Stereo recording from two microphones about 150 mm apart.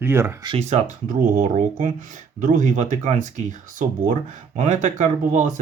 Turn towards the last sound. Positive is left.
turn(degrees=-55)  # may be behind; listen again after turning